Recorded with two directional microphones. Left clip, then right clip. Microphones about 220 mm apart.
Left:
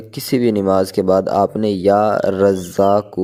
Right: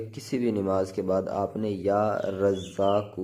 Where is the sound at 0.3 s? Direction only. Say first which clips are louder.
Left 12 dB; 35° left (ahead or behind).